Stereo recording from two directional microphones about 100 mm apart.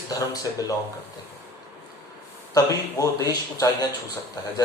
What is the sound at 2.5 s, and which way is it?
A man's voice, 35° left (ahead or behind).